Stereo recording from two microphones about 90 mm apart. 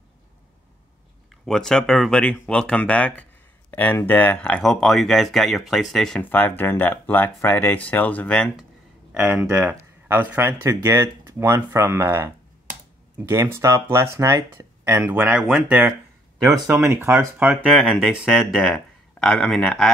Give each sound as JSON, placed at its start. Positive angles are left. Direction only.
{"t": 1.4, "sound": "speech", "side_deg": 5}
{"t": 4.6, "sound": "speech", "side_deg": 5}
{"t": 6.2, "sound": "speech", "side_deg": 20}
{"t": 9.2, "sound": "speech", "side_deg": -20}
{"t": 15.0, "sound": "speech", "side_deg": -15}
{"t": 16.6, "sound": "speech", "side_deg": -35}
{"t": 17.6, "sound": "speech", "side_deg": 0}